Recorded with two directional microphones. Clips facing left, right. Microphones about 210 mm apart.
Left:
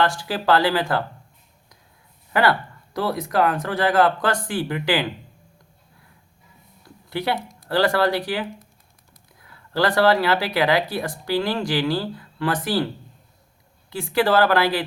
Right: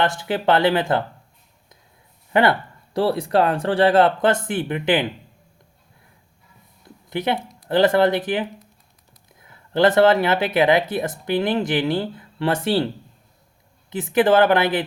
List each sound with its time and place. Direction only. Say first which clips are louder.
0.0 s speech: right 1 dB; 20° right (ahead or behind)
2.3 s speech: right 2 dB; 25° right (ahead or behind)
6.8 s a sound: right 2 dB; 20° right (ahead or behind)
7.3 s a sound: right 1 dB; 50° left (ahead or behind)
7.7 s speech: right 3 dB; 20° right (ahead or behind)
13.9 s speech: right 3 dB; 20° right (ahead or behind)